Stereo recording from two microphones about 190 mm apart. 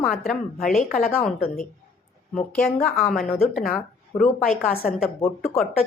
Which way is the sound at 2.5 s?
5° left (ahead or behind).